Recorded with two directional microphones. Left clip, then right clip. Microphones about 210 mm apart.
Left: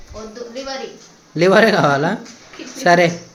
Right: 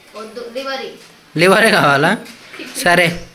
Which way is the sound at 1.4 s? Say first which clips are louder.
Right 1 dB; centre (ahead or behind).